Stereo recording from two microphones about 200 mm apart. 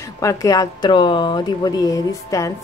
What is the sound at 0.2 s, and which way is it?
Speech, 15° left (ahead or behind).